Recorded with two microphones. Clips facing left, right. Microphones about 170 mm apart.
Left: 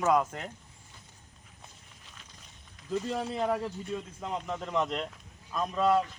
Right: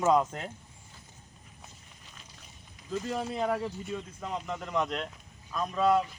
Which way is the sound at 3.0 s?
Centre (ahead or behind).